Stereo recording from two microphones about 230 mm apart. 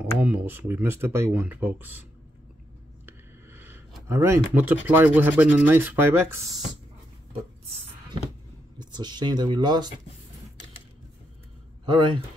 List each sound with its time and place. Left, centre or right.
0.0 s speech: centre
3.1 s a sound: centre
4.8 s speech: centre
8.7 s speech: centre
11.8 s speech: right